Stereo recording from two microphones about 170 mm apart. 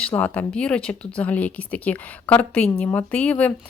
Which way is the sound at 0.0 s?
5° left (ahead or behind).